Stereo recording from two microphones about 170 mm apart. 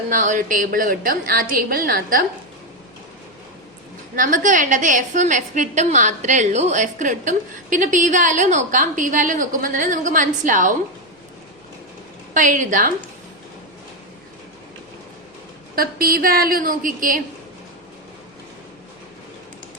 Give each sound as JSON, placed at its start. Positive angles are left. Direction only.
{"t": 0.1, "sound": "a woman's voice", "side_deg": -50}
{"t": 4.1, "sound": "a woman's voice", "side_deg": -50}
{"t": 12.3, "sound": "a woman's voice", "side_deg": -50}
{"t": 15.7, "sound": "a woman's voice", "side_deg": -60}